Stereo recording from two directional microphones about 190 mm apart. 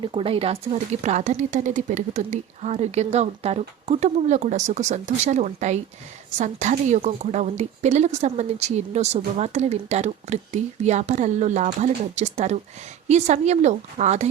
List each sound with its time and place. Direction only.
0.0 s speech: 25° right (ahead or behind)